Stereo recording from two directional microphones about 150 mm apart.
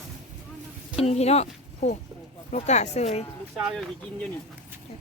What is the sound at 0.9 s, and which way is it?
Speech, 45° left (ahead or behind).